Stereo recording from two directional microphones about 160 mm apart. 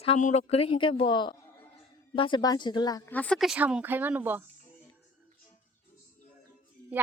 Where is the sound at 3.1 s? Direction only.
10° left (ahead or behind); by 4.4 s 10° right (ahead or behind).